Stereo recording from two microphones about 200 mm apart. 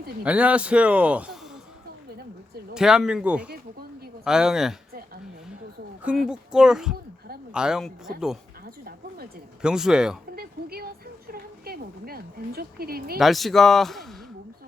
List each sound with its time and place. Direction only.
0.3 s a man's voice: 5° right (ahead or behind)
2.7 s a man's voice: 5° right (ahead or behind)
6.2 s a man's voice: 5° right (ahead or behind)
9.6 s a man's voice: 5° right (ahead or behind)
10.3 s a sound: 50° right (ahead or behind)
13.1 s a man's voice: centre (ahead or behind)